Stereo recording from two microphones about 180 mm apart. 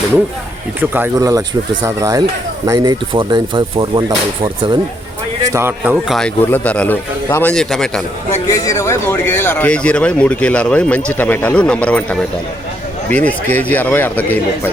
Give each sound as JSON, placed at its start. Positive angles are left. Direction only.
{"t": 0.8, "sound": "speech", "side_deg": -10}
{"t": 5.4, "sound": "speech", "side_deg": -15}
{"t": 6.1, "sound": "a man's voice", "side_deg": 10}
{"t": 8.4, "sound": "speech", "side_deg": 20}